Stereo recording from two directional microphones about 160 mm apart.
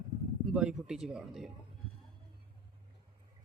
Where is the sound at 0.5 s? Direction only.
5° right (ahead or behind).